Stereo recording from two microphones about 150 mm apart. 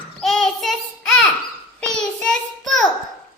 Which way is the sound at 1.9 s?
5° left (ahead or behind).